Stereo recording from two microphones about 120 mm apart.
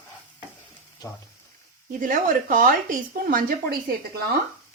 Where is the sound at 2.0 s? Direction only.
90° right.